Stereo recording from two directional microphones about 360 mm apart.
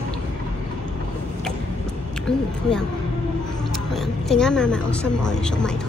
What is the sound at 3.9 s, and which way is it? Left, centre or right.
Speech, centre.